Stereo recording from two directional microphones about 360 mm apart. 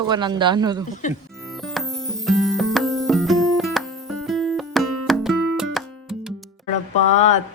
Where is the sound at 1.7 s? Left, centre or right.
Centre.